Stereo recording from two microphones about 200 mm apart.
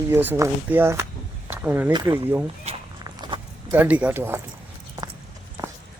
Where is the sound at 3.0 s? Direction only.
20° right (ahead or behind).